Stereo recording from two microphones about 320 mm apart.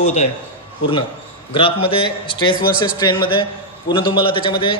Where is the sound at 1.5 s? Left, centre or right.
Centre.